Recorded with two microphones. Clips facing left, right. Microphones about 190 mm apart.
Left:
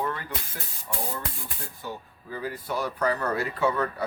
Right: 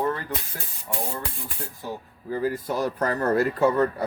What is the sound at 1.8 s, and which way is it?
Speech, 40° right (ahead or behind).